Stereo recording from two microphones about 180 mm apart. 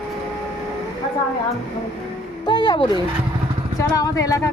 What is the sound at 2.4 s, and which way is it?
Speech, 25° left (ahead or behind).